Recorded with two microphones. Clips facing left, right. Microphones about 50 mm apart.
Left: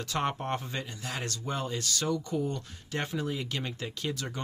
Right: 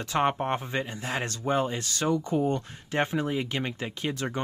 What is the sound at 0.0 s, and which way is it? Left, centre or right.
Speech, right.